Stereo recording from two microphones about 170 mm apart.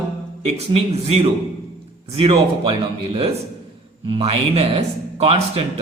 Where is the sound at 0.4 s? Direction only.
35° right (ahead or behind).